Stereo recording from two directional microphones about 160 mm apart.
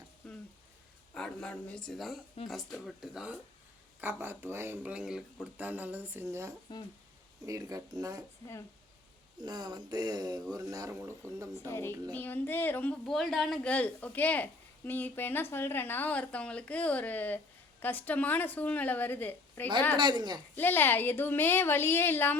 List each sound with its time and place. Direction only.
0.2 s a sound: 5° left (ahead or behind)
1.1 s speech: 5° left (ahead or behind)
4.0 s speech: 15° right (ahead or behind)
6.7 s speech: 30° left (ahead or behind)
7.4 s speech: 20° right (ahead or behind)
9.4 s speech: 25° right (ahead or behind)
12.1 s a woman's voice: 10° left (ahead or behind)
20.0 s speech: 25° right (ahead or behind)
20.6 s a woman's voice: 10° left (ahead or behind)